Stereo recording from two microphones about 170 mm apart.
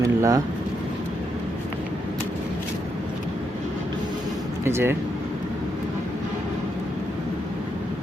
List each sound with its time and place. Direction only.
0.0 s speech: 20° right (ahead or behind)
4.6 s speech: 15° right (ahead or behind)